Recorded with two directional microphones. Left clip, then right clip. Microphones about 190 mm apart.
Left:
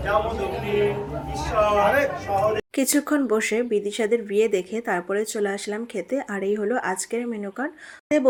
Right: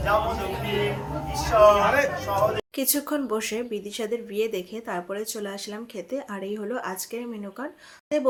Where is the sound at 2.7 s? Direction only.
30° left (ahead or behind).